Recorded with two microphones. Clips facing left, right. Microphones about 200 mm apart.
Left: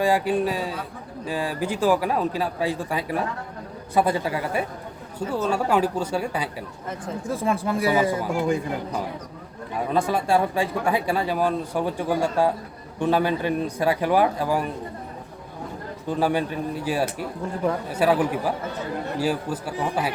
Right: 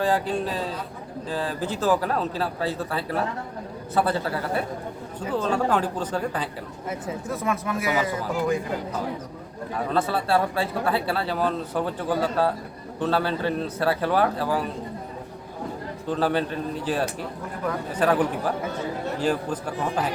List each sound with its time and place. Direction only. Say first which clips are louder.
0.0 s speech: left 3 dB; 10° left (ahead or behind)
7.3 s speech: left 4 dB; 30° left (ahead or behind)
9.7 s speech: left 2 dB; 15° left (ahead or behind)
16.0 s speech: left 1 dB; 10° left (ahead or behind)